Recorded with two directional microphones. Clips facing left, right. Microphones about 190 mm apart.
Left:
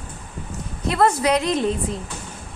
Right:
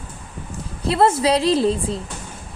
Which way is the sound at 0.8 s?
30° right (ahead or behind).